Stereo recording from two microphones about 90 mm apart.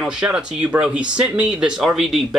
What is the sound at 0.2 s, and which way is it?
Speech, 10° right (ahead or behind).